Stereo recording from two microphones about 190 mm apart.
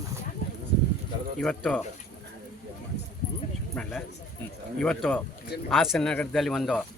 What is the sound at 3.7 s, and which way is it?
Speech, centre (ahead or behind).